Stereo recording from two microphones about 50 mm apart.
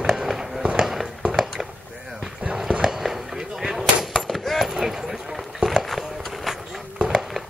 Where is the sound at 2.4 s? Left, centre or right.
Centre.